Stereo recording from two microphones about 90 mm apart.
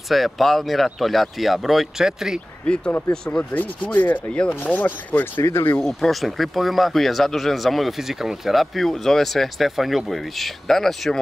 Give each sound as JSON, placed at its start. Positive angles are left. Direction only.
{"t": 0.1, "sound": "speech", "side_deg": 0}
{"t": 2.6, "sound": "rub", "side_deg": 10}
{"t": 4.7, "sound": "speech", "side_deg": 20}
{"t": 5.8, "sound": "speech", "side_deg": 5}